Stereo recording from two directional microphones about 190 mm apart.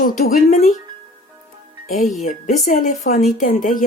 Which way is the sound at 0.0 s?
45° left (ahead or behind).